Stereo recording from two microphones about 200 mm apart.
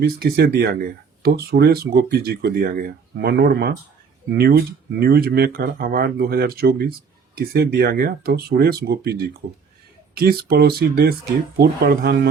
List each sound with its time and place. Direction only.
0.0 s speech: 55° right (ahead or behind)